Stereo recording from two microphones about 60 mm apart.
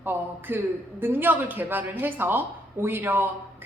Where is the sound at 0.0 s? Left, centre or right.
Right.